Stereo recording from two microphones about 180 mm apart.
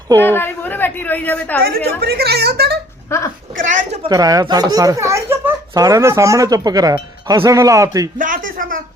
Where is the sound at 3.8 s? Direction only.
40° right (ahead or behind).